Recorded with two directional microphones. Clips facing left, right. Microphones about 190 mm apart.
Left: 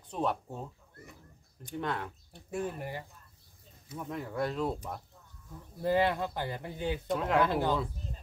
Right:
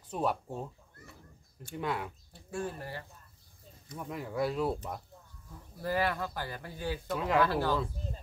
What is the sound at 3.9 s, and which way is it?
Speech, centre (ahead or behind).